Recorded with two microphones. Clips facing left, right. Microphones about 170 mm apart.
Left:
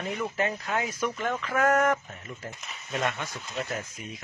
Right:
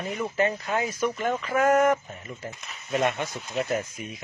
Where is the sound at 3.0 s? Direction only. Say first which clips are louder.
Right 3 dB; 20° right (ahead or behind).